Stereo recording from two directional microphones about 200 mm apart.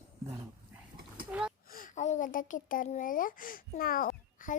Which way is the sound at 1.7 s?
45° left (ahead or behind).